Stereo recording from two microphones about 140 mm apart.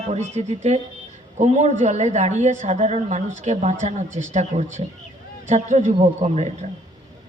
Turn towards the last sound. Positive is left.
turn(degrees=-50)  # may be behind; listen again after turning